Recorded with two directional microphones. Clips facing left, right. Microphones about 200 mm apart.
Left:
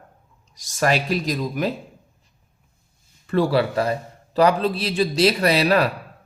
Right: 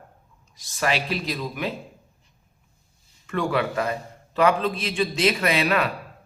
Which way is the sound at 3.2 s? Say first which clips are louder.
Left 5 dB; 35° left (ahead or behind).